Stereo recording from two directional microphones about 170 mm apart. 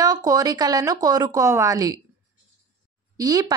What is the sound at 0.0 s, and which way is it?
A woman's voice, 20° right (ahead or behind).